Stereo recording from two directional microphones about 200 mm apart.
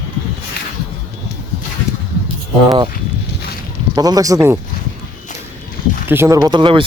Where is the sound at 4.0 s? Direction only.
20° right (ahead or behind).